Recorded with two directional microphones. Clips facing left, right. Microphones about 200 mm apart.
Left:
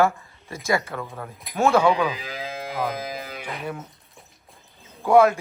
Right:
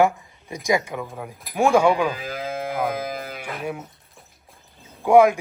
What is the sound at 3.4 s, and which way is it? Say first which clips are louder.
Speech: right 2 dB; 5° right (ahead or behind).